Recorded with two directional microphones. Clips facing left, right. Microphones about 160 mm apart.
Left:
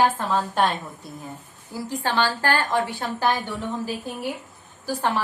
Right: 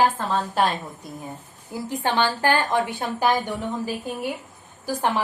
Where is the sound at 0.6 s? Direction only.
Centre (ahead or behind).